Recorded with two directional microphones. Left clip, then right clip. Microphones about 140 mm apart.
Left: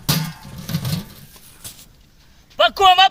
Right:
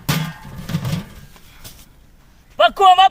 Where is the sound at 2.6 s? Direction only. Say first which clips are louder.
Right 2 dB; 10° right (ahead or behind).